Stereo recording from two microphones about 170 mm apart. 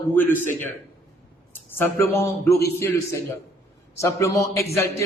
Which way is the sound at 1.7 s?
15° left (ahead or behind).